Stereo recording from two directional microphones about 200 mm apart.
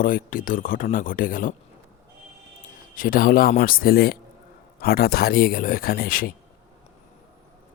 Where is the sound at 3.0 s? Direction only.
45° left (ahead or behind).